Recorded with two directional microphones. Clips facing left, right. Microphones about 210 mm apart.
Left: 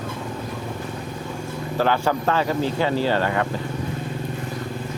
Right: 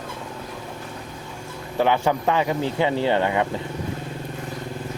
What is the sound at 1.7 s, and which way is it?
Speech, 20° right (ahead or behind).